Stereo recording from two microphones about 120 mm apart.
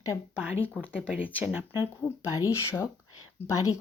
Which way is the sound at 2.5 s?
25° left (ahead or behind).